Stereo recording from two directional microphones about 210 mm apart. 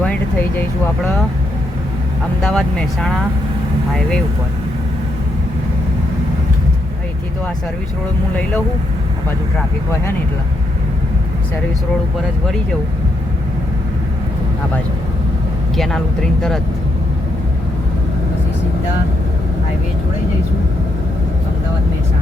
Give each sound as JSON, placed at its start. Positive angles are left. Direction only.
{"t": 0.0, "sound": "speech", "side_deg": 5}
{"t": 2.4, "sound": "speech", "side_deg": 5}
{"t": 15.8, "sound": "speech", "side_deg": 0}